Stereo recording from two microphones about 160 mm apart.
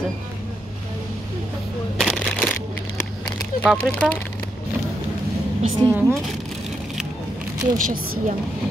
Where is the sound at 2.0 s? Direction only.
5° left (ahead or behind).